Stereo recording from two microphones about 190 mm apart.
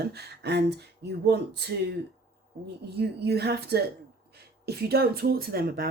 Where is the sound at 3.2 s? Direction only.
60° right (ahead or behind).